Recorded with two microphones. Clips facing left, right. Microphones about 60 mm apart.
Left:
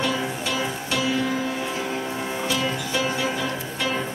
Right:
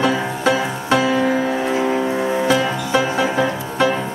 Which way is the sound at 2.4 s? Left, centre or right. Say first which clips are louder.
Right 6 dB; right.